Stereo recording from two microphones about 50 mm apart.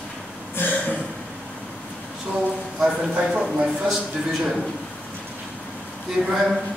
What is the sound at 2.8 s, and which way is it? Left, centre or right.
Speech, right.